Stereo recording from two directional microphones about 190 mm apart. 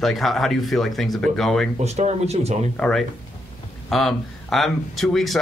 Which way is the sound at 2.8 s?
5° left (ahead or behind).